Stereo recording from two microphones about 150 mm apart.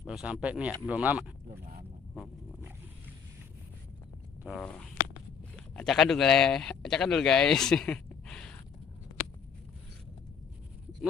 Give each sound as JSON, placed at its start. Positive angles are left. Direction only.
{"t": 0.0, "sound": "speech", "side_deg": -5}
{"t": 4.6, "sound": "speech", "side_deg": 5}